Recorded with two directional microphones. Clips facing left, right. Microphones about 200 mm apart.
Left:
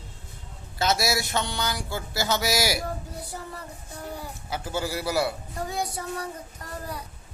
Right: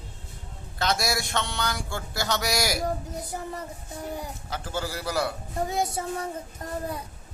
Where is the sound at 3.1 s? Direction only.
20° right (ahead or behind).